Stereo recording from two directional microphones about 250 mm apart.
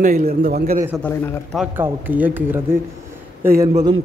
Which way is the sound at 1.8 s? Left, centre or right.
Centre.